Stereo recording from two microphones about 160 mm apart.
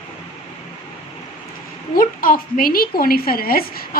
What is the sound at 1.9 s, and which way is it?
A woman's voice, 60° left (ahead or behind).